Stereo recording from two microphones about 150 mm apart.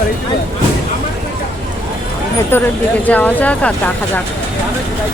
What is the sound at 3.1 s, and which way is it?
Speech, 10° left (ahead or behind).